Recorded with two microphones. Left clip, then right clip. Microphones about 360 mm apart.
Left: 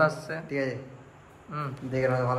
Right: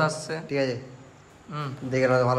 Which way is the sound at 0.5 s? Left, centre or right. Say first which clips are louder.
Right 4 dB; right.